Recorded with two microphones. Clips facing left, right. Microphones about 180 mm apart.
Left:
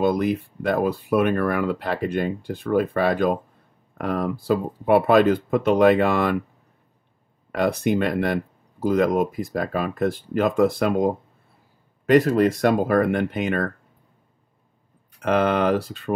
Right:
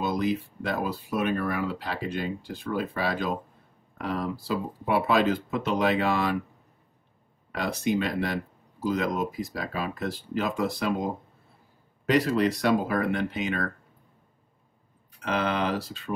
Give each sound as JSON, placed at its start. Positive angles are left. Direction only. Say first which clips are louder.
{"t": 0.0, "sound": "speech", "louder": "left 6 dB", "side_deg": 55}
{"t": 7.5, "sound": "speech", "louder": "left 6 dB", "side_deg": 55}
{"t": 15.1, "sound": "speech", "louder": "left 7 dB", "side_deg": 55}